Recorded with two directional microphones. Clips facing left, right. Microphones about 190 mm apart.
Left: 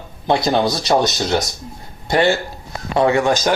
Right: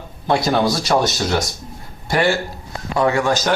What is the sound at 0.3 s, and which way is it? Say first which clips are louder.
Speech: left 1 dB; 20° left (ahead or behind).